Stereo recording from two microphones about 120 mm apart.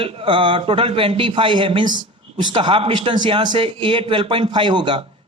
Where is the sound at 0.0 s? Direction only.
45° right (ahead or behind).